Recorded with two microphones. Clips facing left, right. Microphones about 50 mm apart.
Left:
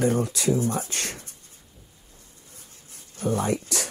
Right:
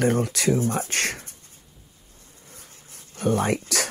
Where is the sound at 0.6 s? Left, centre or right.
Right.